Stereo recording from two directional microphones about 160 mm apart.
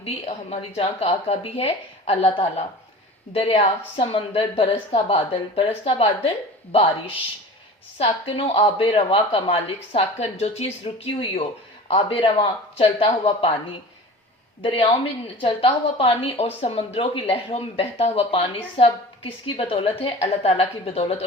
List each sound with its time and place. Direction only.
0.0 s speech: 40° left (ahead or behind)
7.9 s speech: 35° left (ahead or behind)